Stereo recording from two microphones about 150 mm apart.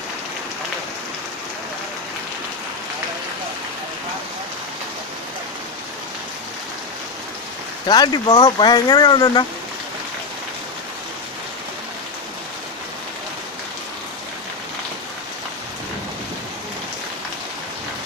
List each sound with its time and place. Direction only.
7.9 s speech: 30° left (ahead or behind)